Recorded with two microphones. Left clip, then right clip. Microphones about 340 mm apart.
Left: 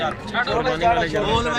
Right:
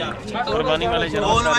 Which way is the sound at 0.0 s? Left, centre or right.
Centre.